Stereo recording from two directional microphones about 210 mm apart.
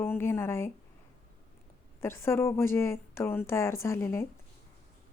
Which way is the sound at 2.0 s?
10° left (ahead or behind).